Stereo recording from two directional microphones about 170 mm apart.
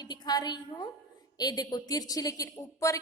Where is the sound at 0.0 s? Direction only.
25° left (ahead or behind).